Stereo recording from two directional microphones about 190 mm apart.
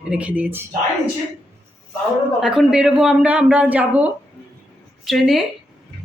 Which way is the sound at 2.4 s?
5° right (ahead or behind).